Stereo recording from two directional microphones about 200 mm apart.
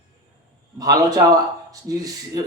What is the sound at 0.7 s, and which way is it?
Speech, 20° right (ahead or behind).